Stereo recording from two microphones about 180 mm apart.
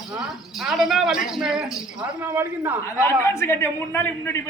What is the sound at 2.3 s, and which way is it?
Speech, 10° right (ahead or behind).